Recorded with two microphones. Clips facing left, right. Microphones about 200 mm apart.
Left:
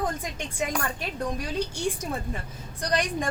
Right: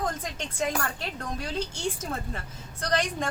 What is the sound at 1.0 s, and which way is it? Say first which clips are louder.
Speech: left 3 dB; 15° left (ahead or behind).